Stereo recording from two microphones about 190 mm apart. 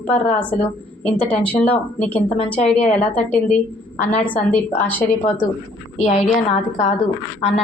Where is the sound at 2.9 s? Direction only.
10° left (ahead or behind).